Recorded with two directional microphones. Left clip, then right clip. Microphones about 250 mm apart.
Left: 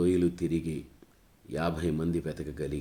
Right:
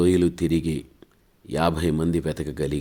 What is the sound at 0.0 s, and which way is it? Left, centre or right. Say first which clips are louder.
Speech: right 7 dB; right.